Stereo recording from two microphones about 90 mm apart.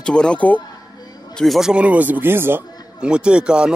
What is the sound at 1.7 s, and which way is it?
Speech, 15° right (ahead or behind).